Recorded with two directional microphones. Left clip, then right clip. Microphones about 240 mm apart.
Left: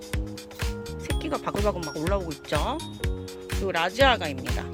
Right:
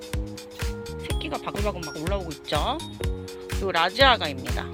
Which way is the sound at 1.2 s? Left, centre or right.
Centre.